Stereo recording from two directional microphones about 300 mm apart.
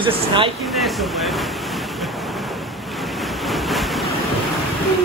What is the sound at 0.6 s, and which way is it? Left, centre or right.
Vehicle, centre.